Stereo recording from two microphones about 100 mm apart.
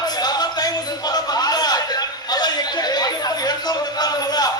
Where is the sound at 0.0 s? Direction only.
45° left (ahead or behind).